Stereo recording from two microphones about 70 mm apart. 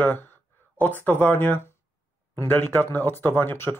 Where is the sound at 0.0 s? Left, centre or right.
Left.